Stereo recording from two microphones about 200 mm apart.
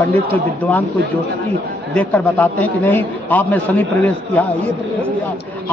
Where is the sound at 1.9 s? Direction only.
10° left (ahead or behind).